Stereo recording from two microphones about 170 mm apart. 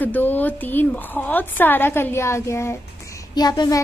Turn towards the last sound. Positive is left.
turn(degrees=25)  # may be behind; listen again after turning